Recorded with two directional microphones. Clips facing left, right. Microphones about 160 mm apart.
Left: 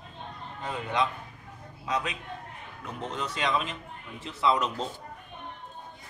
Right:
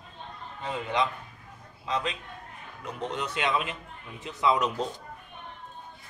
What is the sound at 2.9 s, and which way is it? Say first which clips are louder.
A man's voice: right 1 dB; centre (ahead or behind).